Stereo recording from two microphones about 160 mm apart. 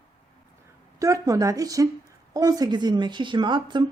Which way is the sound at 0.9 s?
20° right (ahead or behind).